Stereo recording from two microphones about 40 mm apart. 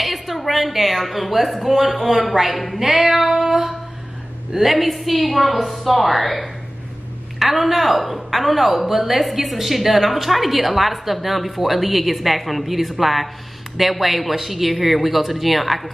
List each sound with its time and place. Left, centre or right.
0.0 s a woman's voice: centre
2.8 s female singing: centre
4.5 s a woman's voice: centre